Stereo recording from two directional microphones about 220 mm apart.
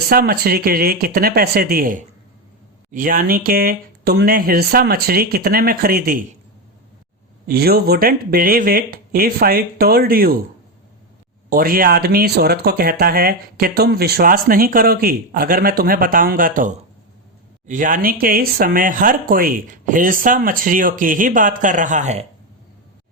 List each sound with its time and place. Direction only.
0.1 s speech: 45° right (ahead or behind)
7.4 s speech: 45° right (ahead or behind)
11.4 s speech: 40° right (ahead or behind)